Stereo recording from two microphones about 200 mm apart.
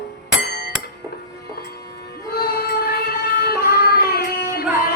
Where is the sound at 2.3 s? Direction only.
50° left (ahead or behind).